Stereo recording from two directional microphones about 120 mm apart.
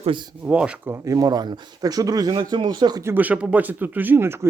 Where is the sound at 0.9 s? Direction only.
25° right (ahead or behind).